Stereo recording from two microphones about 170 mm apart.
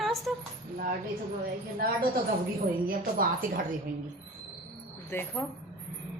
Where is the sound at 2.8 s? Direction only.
55° right (ahead or behind).